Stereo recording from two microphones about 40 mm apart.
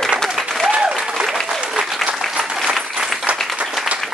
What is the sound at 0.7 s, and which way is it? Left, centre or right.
Applause, right.